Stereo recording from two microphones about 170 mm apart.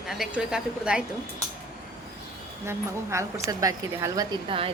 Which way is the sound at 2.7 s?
15° right (ahead or behind).